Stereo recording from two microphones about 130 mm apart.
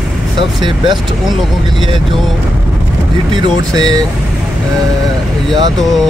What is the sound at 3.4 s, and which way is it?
Speech, 30° right (ahead or behind).